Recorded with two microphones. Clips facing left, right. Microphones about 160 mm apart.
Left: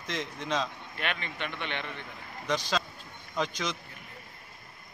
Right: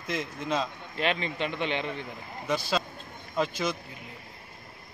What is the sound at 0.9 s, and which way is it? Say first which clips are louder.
A man's voice: right 7 dB; 25° right (ahead or behind).